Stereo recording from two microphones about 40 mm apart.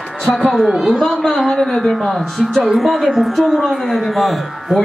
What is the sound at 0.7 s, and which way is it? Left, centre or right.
Speech, centre.